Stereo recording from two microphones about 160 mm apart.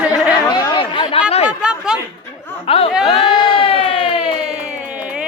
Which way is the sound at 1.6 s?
5° right (ahead or behind).